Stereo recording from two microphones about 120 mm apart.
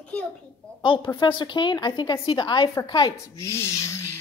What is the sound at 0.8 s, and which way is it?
A woman's voice, 45° left (ahead or behind).